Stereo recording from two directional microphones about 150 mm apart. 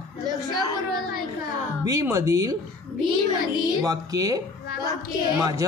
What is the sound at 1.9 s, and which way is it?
Speech, 20° right (ahead or behind).